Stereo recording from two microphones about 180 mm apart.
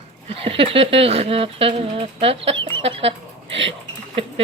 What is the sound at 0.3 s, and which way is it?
Speech, 30° right (ahead or behind).